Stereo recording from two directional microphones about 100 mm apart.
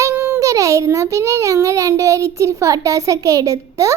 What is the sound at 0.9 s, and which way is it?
A child's voice, 30° right (ahead or behind).